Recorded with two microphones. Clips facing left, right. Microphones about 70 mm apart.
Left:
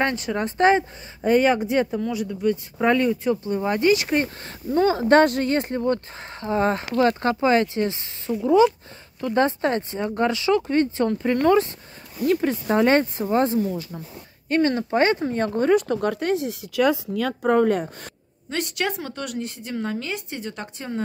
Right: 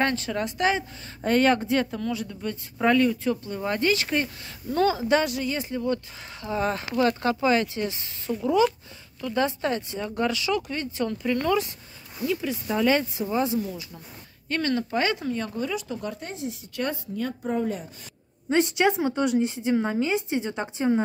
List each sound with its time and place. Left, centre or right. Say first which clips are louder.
0.0 s speech: left 2 dB; centre
0.6 s speech: left 8 dB; left
1.2 s speech: left 3 dB; centre
4.9 s speech: left 7 dB; left
6.4 s speech: left 5 dB; left
9.2 s speech: left 5 dB; left
14.5 s speech: left 5 dB; left
18.5 s speech: right 5 dB; right